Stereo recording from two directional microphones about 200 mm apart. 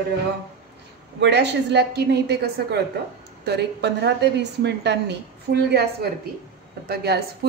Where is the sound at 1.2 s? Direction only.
60° right (ahead or behind).